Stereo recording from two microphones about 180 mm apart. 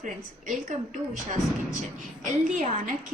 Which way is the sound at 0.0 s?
45° right (ahead or behind).